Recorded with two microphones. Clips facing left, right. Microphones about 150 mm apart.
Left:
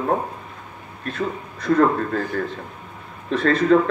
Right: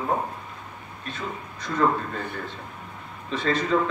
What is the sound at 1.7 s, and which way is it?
Speech, 45° left (ahead or behind).